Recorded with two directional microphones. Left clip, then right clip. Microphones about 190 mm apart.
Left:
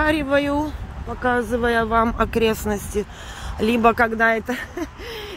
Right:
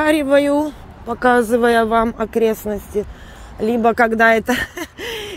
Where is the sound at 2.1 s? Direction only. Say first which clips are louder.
Right 2 dB; 5° left (ahead or behind).